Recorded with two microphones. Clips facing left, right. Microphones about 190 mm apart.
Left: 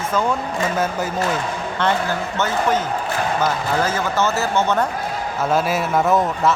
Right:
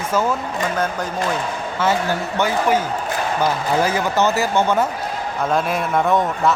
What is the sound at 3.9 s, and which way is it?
Speech, 15° right (ahead or behind).